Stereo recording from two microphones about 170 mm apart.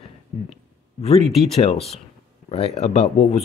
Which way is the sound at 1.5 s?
40° left (ahead or behind).